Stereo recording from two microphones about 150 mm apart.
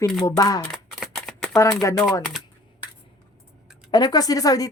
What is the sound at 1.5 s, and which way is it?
Speech, 20° left (ahead or behind).